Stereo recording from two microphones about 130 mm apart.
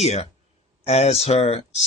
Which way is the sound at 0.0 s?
55° left (ahead or behind).